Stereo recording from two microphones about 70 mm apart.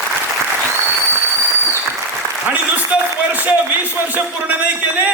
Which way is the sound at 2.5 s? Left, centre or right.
Right.